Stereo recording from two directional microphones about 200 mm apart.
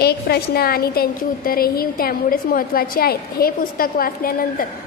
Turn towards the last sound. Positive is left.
turn(degrees=45)  # may be behind; listen again after turning